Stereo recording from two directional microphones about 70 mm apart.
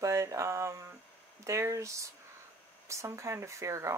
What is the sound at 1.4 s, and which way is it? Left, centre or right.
Speech, right.